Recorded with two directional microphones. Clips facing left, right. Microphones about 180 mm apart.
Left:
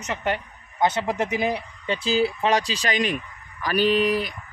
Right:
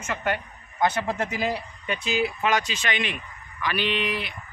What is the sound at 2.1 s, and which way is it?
Speech, 30° left (ahead or behind).